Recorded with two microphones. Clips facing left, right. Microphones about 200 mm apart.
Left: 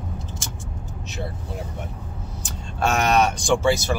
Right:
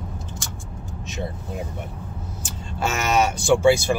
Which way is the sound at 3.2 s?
5° right (ahead or behind).